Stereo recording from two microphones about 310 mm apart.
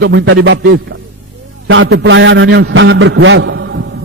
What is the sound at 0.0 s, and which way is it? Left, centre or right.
A man's voice, right.